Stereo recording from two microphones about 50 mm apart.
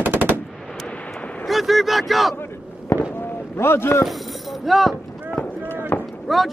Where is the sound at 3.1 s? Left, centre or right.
Left.